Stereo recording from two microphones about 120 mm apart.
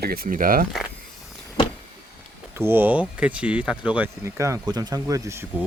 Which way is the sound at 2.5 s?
20° right (ahead or behind).